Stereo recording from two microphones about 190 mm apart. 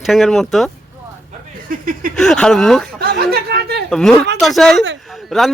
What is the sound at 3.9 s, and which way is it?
Speech, centre (ahead or behind).